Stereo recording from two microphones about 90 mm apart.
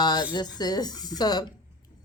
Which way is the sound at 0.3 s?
50° left (ahead or behind).